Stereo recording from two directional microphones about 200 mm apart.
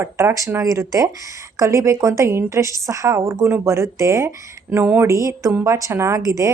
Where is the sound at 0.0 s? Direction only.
15° right (ahead or behind).